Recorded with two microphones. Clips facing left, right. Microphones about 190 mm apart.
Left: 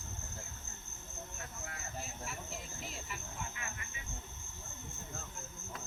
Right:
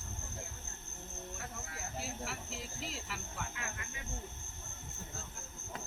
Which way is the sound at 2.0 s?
80° right.